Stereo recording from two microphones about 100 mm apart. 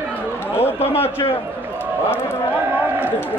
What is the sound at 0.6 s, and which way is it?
Speech, 85° left.